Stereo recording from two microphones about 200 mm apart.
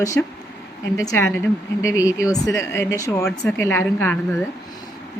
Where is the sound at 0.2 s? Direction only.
10° left (ahead or behind).